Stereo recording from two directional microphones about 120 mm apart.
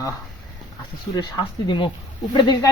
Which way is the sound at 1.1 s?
40° left (ahead or behind).